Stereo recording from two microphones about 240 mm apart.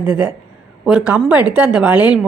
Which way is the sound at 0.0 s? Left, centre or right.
Centre.